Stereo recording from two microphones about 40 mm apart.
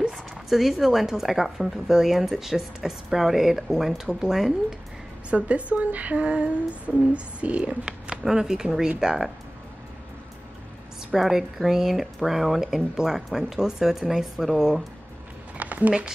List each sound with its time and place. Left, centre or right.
0.1 s speech: centre
5.3 s speech: right
6.2 s a sound: right
7.3 s speech: right
8.2 s speech: centre
11.1 s speech: centre
15.5 s a sound: right